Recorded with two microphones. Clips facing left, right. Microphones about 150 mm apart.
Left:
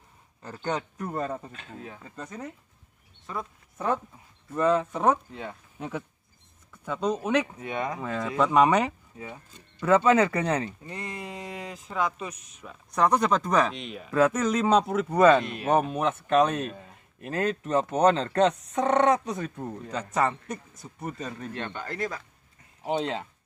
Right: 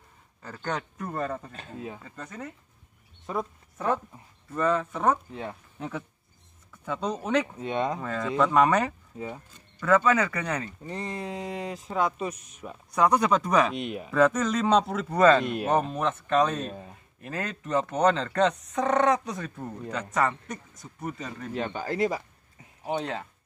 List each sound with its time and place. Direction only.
0.4 s speech: 5° left (ahead or behind)
4.5 s speech: 10° left (ahead or behind)
5.3 s speech: 5° right (ahead or behind)
5.8 s speech: 10° left (ahead or behind)
7.5 s speech: 25° right (ahead or behind)
8.0 s speech: 10° left (ahead or behind)
10.9 s speech: 5° left (ahead or behind)
14.1 s speech: 5° left (ahead or behind); by 22.2 s 10° right (ahead or behind)
22.8 s speech: 25° left (ahead or behind)